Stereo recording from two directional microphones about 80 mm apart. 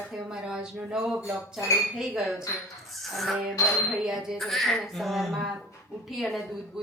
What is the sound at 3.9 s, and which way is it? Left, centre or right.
Speech, centre.